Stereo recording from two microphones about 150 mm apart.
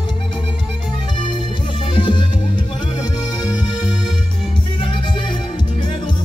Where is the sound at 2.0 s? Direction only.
30° left (ahead or behind).